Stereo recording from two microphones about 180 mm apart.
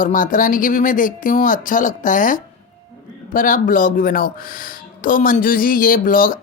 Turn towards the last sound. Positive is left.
turn(degrees=50)  # may be behind; listen again after turning